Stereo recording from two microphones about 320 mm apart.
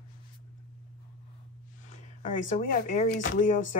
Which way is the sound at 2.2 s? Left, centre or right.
Left.